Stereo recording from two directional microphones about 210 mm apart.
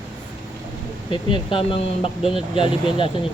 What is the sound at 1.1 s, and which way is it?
Speech, 25° left (ahead or behind).